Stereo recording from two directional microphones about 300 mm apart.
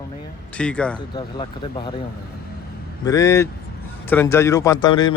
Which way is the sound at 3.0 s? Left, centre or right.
Centre.